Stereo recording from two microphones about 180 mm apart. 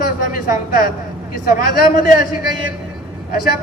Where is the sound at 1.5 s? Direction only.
50° left (ahead or behind).